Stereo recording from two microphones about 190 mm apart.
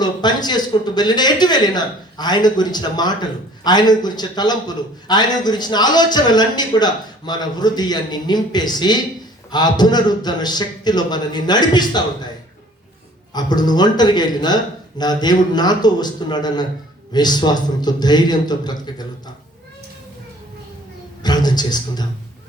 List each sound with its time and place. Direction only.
0.0 s speech: 20° left (ahead or behind)
13.3 s speech: 20° left (ahead or behind)
21.2 s speech: 20° left (ahead or behind)